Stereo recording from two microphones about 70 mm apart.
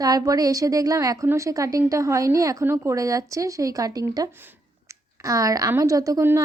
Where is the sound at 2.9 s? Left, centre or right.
Right.